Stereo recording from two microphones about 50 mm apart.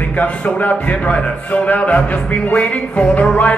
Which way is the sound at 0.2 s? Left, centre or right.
Left.